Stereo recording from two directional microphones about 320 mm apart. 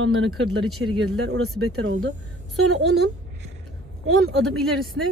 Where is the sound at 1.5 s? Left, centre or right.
Right.